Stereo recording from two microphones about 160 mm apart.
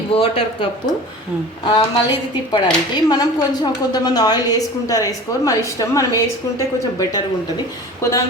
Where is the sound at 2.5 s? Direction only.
25° left (ahead or behind).